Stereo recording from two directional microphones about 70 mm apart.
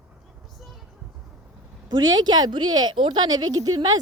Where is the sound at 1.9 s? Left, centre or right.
Right.